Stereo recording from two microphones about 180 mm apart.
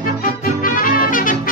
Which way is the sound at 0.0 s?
50° left (ahead or behind).